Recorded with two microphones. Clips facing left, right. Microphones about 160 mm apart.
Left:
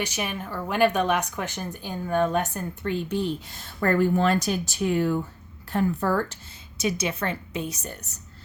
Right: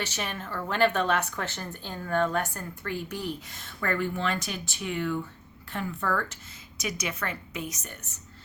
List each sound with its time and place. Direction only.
0.0 s speech: 15° left (ahead or behind)
3.8 s a woman's voice: 40° left (ahead or behind)